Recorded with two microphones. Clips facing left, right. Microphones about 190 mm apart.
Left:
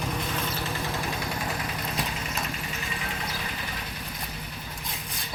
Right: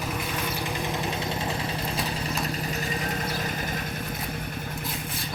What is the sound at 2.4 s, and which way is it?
Vehicle, 40° right (ahead or behind).